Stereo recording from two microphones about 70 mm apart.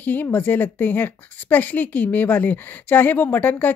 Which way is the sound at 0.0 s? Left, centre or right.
Left.